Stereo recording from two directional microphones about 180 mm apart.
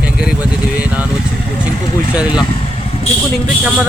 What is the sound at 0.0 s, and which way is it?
Vehicle, 5° right (ahead or behind).